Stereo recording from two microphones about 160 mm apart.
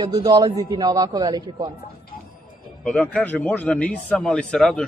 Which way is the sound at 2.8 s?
5° left (ahead or behind).